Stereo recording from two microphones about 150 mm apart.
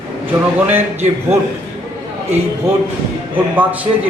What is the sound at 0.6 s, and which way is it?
Speech, 10° right (ahead or behind).